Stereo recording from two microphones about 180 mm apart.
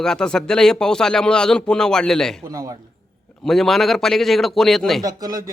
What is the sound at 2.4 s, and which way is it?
Speech, 20° right (ahead or behind).